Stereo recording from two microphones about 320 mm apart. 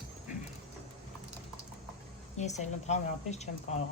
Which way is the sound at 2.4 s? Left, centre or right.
Left.